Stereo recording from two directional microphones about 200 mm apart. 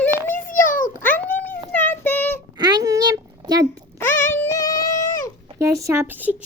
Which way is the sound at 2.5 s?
20° right (ahead or behind).